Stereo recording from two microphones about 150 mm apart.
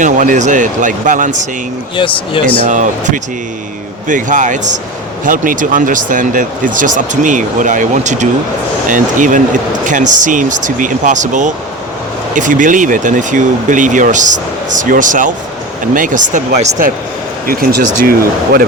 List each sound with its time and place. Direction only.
0.0 s speech: 55° right (ahead or behind)
2.0 s speech: 35° left (ahead or behind)
2.6 s speech: 55° right (ahead or behind)
17.4 s speech: 80° right